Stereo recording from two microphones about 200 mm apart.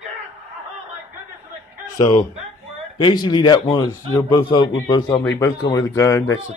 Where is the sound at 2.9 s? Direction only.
25° left (ahead or behind).